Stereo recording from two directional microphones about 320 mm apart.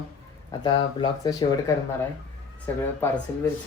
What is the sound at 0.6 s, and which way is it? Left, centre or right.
Speech, centre.